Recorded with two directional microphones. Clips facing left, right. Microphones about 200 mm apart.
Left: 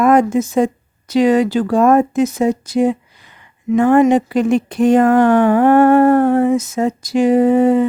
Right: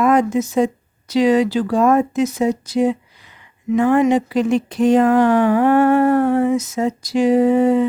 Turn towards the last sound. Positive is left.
turn(degrees=50)  # may be behind; listen again after turning